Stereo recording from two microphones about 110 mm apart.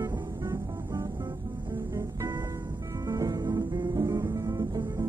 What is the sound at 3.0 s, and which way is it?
Music, 30° right (ahead or behind).